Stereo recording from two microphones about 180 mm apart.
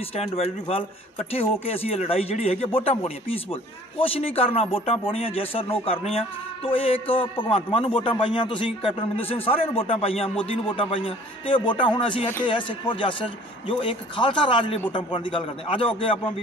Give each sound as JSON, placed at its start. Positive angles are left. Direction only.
{"t": 0.1, "sound": "a man's voice", "side_deg": 35}